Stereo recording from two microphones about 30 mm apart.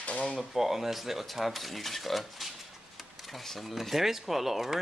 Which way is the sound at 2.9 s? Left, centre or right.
Centre.